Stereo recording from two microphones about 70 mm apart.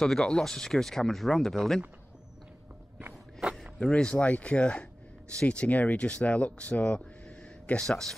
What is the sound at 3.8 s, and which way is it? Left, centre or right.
Speech, centre.